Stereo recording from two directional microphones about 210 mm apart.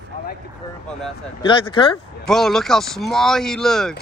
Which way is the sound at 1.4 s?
25° left (ahead or behind).